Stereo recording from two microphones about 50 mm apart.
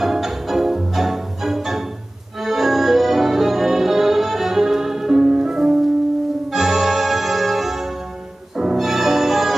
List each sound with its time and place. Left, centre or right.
0.0 s music: centre